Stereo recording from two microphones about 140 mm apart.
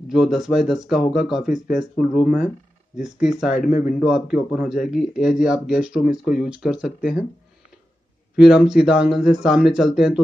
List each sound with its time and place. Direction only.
0.1 s speech: 5° right (ahead or behind)
8.4 s speech: 5° right (ahead or behind)